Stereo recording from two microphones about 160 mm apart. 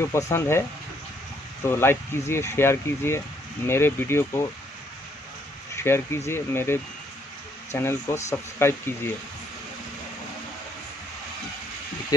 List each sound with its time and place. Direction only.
0.0 s speech: 15° left (ahead or behind)
1.7 s speech: 15° left (ahead or behind)
5.8 s speech: 15° left (ahead or behind)
12.1 s speech: 25° left (ahead or behind)